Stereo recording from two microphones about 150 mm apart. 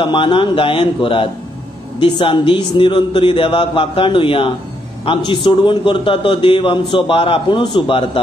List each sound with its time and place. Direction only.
0.0 s a man's voice: 35° left (ahead or behind)